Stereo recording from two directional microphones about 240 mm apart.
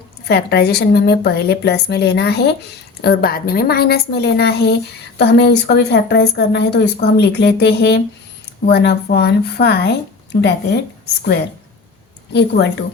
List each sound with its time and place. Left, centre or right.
0.3 s a woman's voice: left
12.3 s a woman's voice: left